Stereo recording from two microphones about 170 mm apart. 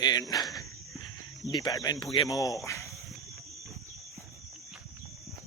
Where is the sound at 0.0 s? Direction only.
25° left (ahead or behind).